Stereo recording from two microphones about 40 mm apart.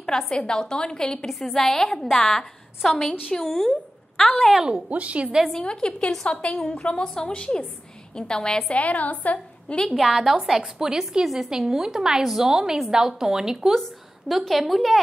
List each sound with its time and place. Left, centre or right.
0.3 s a woman's voice: centre
1.4 s a woman's voice: centre
4.8 s a woman's voice: right
5.5 s a woman's voice: left
8.7 s a woman's voice: left
9.8 s a woman's voice: centre
14.5 s a woman's voice: centre